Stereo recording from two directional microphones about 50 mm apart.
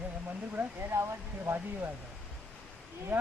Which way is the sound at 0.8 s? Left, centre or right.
Right.